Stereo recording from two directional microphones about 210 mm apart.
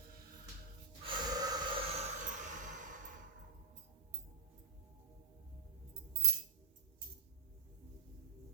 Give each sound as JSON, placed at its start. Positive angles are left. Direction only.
{"t": 1.0, "sound": "snort", "side_deg": -20}